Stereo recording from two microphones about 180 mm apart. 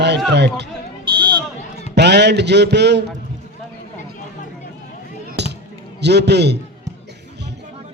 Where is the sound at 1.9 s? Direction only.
70° right (ahead or behind).